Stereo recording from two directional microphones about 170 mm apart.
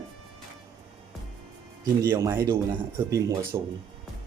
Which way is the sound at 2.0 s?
15° right (ahead or behind).